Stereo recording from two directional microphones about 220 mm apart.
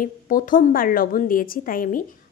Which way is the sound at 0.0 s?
40° left (ahead or behind).